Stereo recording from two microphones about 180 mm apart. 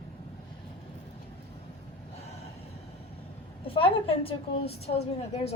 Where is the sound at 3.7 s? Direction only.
30° left (ahead or behind).